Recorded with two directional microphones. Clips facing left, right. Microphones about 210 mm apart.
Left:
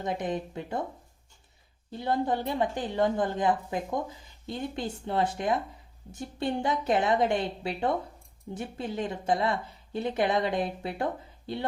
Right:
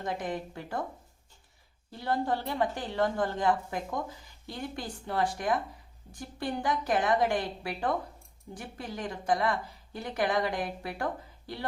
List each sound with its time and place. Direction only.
0.0 s a woman's voice: 20° left (ahead or behind)
1.9 s a woman's voice: 20° left (ahead or behind)